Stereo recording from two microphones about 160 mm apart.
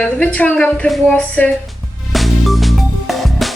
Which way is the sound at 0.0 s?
10° left (ahead or behind).